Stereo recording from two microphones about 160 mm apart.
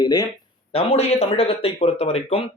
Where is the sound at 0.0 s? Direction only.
25° left (ahead or behind).